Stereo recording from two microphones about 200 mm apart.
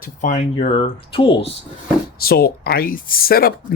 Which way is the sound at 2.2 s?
50° left (ahead or behind).